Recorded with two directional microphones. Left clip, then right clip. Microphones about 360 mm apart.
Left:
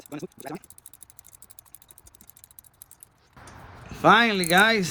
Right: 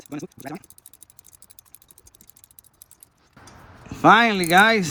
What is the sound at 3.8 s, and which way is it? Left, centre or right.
Speech, centre.